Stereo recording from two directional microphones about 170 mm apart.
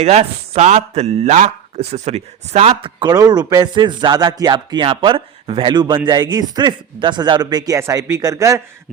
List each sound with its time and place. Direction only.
0.0 s speech: 40° right (ahead or behind); by 8.6 s 20° right (ahead or behind)